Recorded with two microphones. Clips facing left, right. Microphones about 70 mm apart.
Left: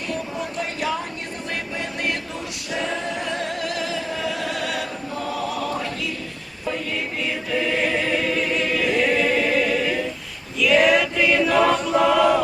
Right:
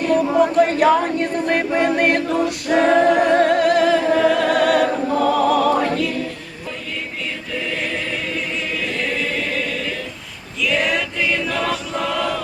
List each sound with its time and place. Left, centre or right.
0.0 s chant: right
7.5 s choir: centre
10.6 s choir: centre